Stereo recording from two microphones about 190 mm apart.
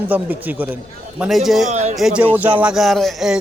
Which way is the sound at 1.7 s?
35° right (ahead or behind).